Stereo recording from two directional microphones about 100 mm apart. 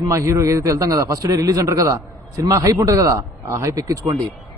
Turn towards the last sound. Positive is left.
turn(degrees=-35)  # may be behind; listen again after turning